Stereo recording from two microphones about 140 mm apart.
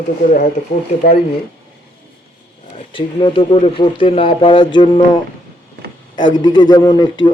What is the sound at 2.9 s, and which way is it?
Speech, 35° left (ahead or behind).